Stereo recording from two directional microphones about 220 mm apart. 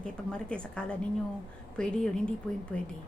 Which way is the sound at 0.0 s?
5° left (ahead or behind).